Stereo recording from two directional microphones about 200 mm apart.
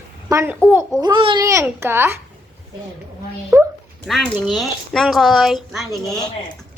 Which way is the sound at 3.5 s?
10° right (ahead or behind).